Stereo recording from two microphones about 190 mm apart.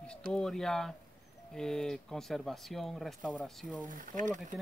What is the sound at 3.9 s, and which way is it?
Speech, 40° right (ahead or behind).